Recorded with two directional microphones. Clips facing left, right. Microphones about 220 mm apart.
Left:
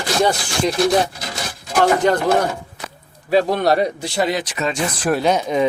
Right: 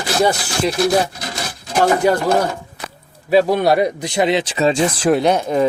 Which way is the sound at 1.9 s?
10° right (ahead or behind).